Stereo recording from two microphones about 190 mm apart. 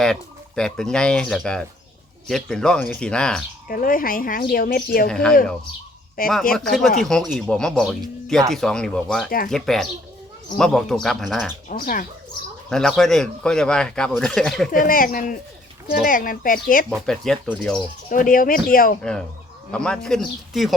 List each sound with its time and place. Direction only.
0.0 s a man's voice: 5° left (ahead or behind)
3.7 s speech: 45° left (ahead or behind)
5.0 s a man's voice: 5° left (ahead or behind)
6.2 s speech: 45° left (ahead or behind)
6.5 s a man's voice: centre (ahead or behind)
11.7 s speech: 45° left (ahead or behind)
12.7 s a man's voice: 5° left (ahead or behind)
14.7 s speech: 45° left (ahead or behind)
17.1 s a man's voice: centre (ahead or behind)
18.1 s speech: 45° left (ahead or behind)
19.7 s a man's voice: 5° left (ahead or behind)